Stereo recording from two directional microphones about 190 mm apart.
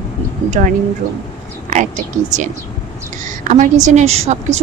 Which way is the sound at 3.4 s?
40° right (ahead or behind).